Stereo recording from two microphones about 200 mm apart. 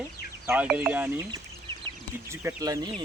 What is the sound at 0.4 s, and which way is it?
Speech, 5° right (ahead or behind).